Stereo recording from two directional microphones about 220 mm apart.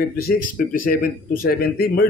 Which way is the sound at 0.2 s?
40° left (ahead or behind).